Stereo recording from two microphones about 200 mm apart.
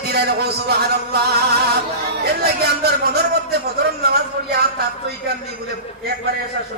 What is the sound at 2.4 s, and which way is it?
A man's voice, 55° right (ahead or behind).